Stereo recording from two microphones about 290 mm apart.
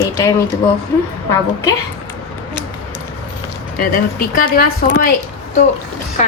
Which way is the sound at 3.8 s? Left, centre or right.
Left.